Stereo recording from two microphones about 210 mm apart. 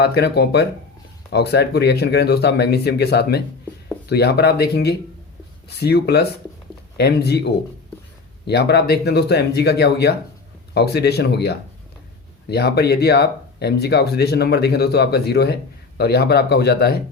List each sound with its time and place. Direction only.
0.0 s speech: 50° left (ahead or behind)
8.4 s speech: 50° left (ahead or behind)